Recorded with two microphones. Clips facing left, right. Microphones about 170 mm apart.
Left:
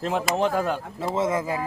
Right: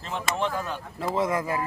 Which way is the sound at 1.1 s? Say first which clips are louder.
Left 1 dB; 25° left (ahead or behind).